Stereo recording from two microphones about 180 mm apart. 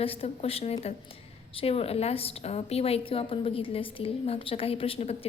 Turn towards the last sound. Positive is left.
turn(degrees=35)  # may be behind; listen again after turning